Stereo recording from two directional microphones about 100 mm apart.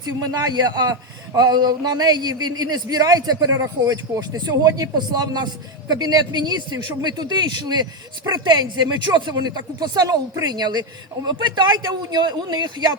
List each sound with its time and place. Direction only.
0.0 s a man's voice: 40° right (ahead or behind)